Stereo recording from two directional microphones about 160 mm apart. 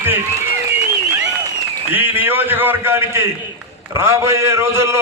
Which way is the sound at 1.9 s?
10° right (ahead or behind).